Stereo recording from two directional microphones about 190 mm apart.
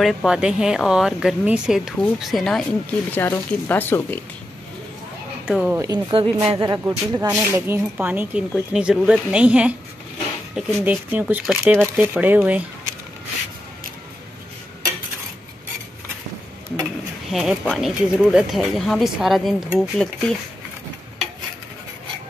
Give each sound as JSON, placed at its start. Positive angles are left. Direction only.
{"t": 0.0, "sound": "speech", "side_deg": 0}
{"t": 5.5, "sound": "speech", "side_deg": -5}
{"t": 5.8, "sound": "speech", "side_deg": -20}
{"t": 17.3, "sound": "speech", "side_deg": 0}